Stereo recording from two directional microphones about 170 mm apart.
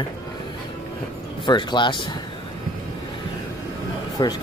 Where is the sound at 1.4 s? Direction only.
25° left (ahead or behind).